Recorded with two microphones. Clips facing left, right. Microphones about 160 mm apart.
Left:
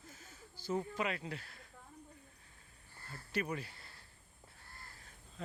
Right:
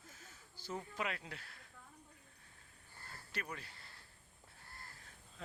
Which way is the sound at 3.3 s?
10° left (ahead or behind).